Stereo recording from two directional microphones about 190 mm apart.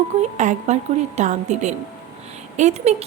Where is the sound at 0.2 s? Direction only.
40° right (ahead or behind).